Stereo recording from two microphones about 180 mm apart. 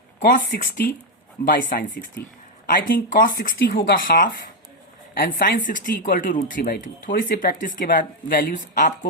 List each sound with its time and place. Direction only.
0.3 s speech: 50° left (ahead or behind)